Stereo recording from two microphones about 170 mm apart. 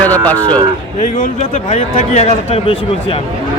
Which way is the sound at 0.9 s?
45° left (ahead or behind).